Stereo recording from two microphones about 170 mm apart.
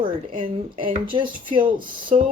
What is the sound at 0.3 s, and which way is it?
A woman's voice, 30° right (ahead or behind).